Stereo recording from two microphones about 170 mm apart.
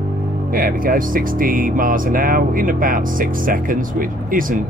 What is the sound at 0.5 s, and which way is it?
Speech, 55° right (ahead or behind).